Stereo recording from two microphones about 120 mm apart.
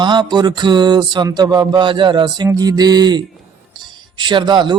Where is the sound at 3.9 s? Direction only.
40° right (ahead or behind).